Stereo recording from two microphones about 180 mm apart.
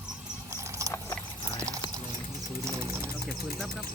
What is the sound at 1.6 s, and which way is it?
Clip-clop, 15° right (ahead or behind).